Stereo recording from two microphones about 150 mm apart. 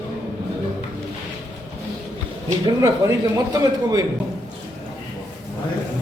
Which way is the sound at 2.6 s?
20° right (ahead or behind).